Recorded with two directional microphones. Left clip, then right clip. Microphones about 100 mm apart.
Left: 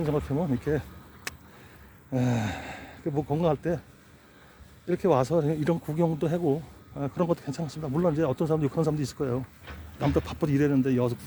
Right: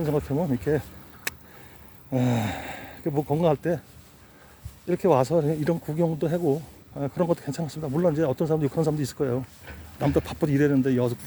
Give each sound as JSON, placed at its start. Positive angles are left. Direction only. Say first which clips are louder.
{"t": 0.0, "sound": "speech", "louder": "right 2 dB", "side_deg": -30}
{"t": 4.9, "sound": "speech", "louder": "right 3 dB", "side_deg": -30}